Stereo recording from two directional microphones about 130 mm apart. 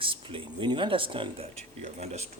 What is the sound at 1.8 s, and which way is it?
Speech, 60° right (ahead or behind).